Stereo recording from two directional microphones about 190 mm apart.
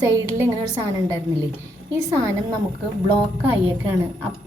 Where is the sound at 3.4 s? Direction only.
10° right (ahead or behind).